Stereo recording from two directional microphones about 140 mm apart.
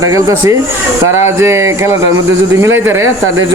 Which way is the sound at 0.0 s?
20° right (ahead or behind).